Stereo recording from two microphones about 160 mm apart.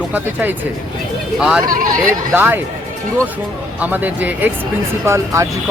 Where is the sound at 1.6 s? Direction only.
60° right (ahead or behind).